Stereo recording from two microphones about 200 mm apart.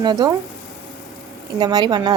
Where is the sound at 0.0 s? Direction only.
20° right (ahead or behind).